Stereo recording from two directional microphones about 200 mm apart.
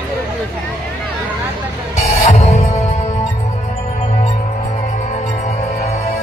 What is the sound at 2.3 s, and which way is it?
Music, 35° left (ahead or behind).